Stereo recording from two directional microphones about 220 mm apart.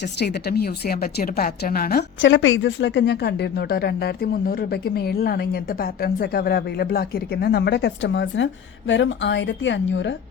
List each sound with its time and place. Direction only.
0.2 s a woman's voice: 45° left (ahead or behind)